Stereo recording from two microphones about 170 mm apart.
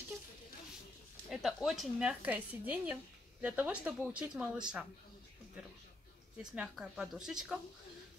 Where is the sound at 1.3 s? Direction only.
Centre (ahead or behind).